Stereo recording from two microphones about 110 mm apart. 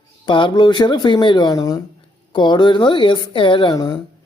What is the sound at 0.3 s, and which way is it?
Speech, 45° left (ahead or behind).